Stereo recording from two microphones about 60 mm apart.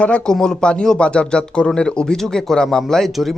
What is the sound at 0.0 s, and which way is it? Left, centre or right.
A man's voice, centre.